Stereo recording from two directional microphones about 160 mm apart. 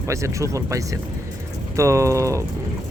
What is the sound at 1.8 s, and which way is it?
Speech, 20° right (ahead or behind).